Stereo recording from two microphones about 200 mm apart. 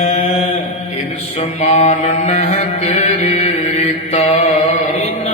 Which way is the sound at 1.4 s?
35° left (ahead or behind).